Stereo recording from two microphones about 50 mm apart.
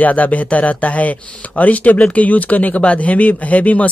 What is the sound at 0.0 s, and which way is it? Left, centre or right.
Speech, left.